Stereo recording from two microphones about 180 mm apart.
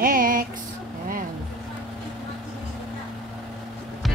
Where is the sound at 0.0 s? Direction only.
50° right (ahead or behind).